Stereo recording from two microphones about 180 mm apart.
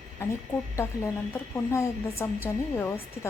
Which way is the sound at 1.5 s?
15° left (ahead or behind).